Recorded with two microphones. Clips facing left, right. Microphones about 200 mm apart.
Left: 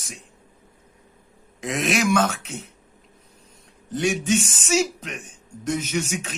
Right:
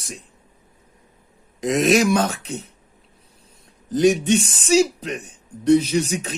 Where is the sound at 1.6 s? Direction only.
40° right (ahead or behind).